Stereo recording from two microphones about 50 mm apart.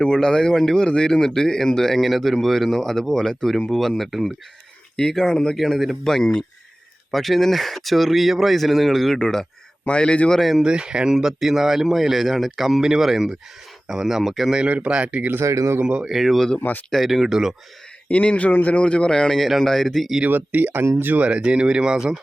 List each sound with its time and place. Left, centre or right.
0.0 s speech: centre
4.9 s speech: centre
10.6 s speech: centre
14.8 s speech: right
15.4 s speech: right
15.8 s speech: right
16.0 s speech: centre
18.1 s speech: left
19.4 s speech: centre
20.2 s speech: right
21.2 s speech: right